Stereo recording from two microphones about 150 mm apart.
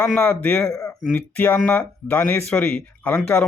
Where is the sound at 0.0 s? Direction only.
15° left (ahead or behind).